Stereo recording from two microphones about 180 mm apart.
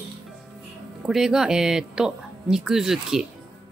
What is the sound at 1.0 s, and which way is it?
Speech, 5° right (ahead or behind).